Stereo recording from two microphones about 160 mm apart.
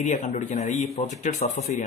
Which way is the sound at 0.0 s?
50° left (ahead or behind).